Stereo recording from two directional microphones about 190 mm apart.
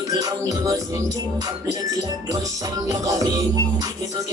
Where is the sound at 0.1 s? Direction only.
20° right (ahead or behind).